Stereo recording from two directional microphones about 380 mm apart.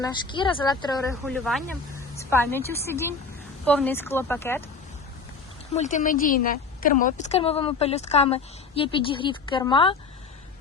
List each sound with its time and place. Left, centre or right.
0.0 s a woman's voice: centre
1.1 s a woman's voice: centre
5.7 s a woman's voice: centre